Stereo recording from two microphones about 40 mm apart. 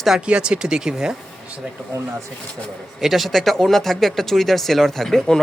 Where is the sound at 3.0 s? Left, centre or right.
Centre.